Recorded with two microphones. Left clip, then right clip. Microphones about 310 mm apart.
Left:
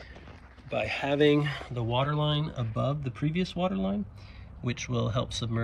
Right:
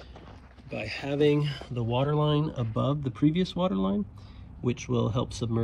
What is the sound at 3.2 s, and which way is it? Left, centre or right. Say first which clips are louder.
Speech: right 4 dB; left.